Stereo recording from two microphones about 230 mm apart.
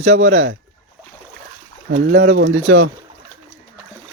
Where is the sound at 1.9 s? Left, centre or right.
Right.